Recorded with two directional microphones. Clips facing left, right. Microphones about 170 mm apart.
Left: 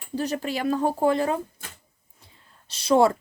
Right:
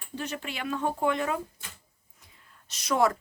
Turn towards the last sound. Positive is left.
turn(degrees=30)  # may be behind; listen again after turning